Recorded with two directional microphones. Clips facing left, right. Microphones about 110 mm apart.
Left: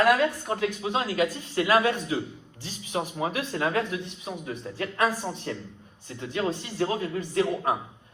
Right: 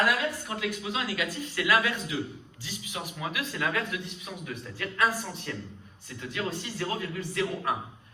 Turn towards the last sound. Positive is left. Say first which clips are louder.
# left 5 dB
turn(degrees=30)  # may be behind; listen again after turning